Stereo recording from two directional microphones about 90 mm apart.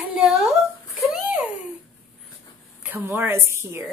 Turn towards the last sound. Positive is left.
turn(degrees=-30)  # may be behind; listen again after turning